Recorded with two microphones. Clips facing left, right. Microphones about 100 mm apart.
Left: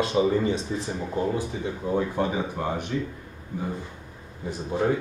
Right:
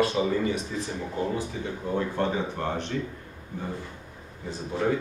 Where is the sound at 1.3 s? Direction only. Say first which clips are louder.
Left 2 dB; 15° left (ahead or behind).